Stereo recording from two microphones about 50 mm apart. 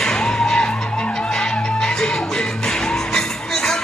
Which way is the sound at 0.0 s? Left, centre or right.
Centre.